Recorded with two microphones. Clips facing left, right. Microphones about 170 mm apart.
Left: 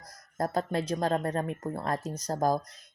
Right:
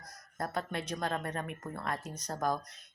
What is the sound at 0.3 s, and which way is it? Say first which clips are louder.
Speech: left 7 dB; 35° left (ahead or behind).